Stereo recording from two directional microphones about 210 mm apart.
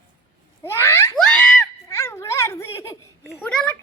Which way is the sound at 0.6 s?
10° left (ahead or behind).